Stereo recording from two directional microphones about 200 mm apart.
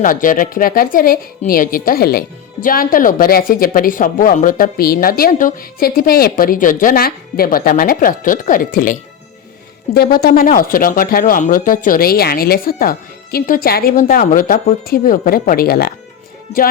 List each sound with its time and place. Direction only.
0.0 s a woman's voice: 40° left (ahead or behind)